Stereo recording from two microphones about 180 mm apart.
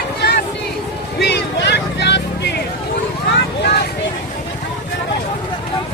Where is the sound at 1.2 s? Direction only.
70° left (ahead or behind).